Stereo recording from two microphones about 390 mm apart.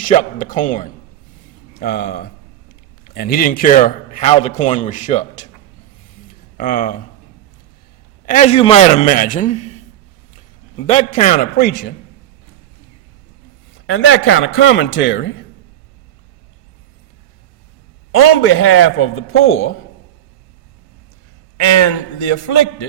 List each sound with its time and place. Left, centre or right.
0.0 s a man's voice: centre
6.6 s a man's voice: left
8.3 s a man's voice: centre
13.8 s a man's voice: left
18.1 s a man's voice: left
21.6 s a man's voice: left